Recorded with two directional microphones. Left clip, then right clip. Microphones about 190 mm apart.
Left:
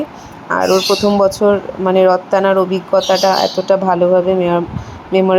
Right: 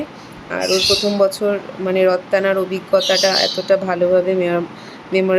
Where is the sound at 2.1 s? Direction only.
5° right (ahead or behind).